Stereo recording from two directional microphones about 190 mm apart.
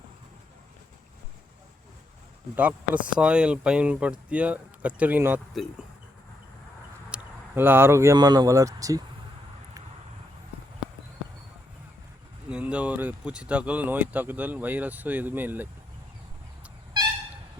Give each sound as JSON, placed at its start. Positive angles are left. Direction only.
{"t": 2.6, "sound": "speech", "side_deg": -5}
{"t": 7.1, "sound": "speech", "side_deg": -10}
{"t": 12.5, "sound": "speech", "side_deg": -5}